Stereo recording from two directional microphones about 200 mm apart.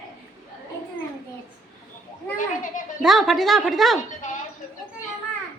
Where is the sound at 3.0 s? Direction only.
Centre (ahead or behind).